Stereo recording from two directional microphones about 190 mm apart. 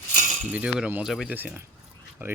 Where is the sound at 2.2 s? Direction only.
10° right (ahead or behind).